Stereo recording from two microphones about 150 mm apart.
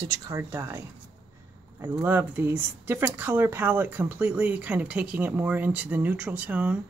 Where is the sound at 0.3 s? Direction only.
20° right (ahead or behind).